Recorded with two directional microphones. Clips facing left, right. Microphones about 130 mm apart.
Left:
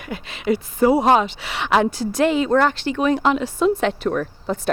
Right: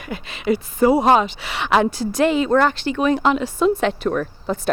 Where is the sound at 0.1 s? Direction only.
15° right (ahead or behind).